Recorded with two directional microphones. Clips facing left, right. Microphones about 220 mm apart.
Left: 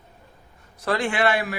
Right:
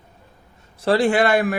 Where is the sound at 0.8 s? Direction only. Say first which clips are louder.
Right 6 dB; 35° right (ahead or behind).